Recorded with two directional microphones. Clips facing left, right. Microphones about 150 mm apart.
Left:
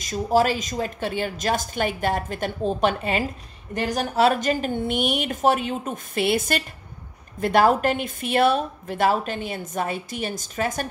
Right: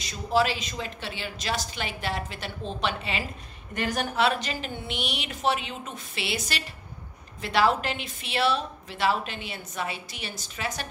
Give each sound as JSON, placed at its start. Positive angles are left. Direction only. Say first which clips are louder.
{"t": 0.0, "sound": "a woman's voice", "louder": "left 5 dB", "side_deg": 45}
{"t": 3.7, "sound": "a woman's voice", "louder": "left 4 dB", "side_deg": 35}